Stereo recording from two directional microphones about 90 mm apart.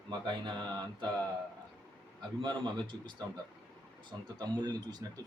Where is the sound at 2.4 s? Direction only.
60° right (ahead or behind).